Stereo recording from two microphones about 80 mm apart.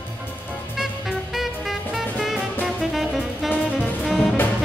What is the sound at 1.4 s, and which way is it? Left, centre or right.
Music, centre.